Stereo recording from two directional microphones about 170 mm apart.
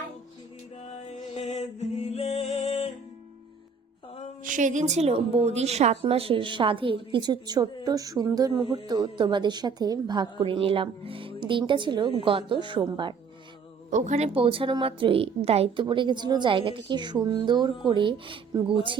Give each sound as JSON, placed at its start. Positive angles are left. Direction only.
{"t": 1.4, "sound": "music", "side_deg": 40}
{"t": 4.4, "sound": "a woman's voice", "side_deg": -50}
{"t": 13.9, "sound": "a woman's voice", "side_deg": -45}